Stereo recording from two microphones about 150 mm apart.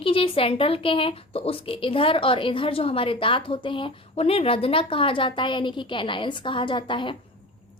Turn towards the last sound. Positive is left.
turn(degrees=35)  # may be behind; listen again after turning